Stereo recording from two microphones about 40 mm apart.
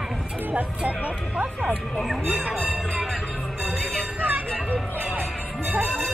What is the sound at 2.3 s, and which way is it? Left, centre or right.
Speech, right.